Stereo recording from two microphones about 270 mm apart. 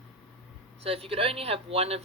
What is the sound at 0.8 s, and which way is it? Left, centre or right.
Speech, right.